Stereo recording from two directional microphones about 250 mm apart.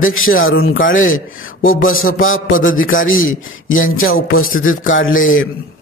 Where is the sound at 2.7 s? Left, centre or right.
Left.